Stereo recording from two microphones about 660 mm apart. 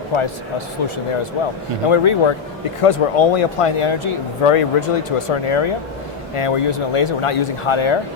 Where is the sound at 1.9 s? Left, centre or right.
Left.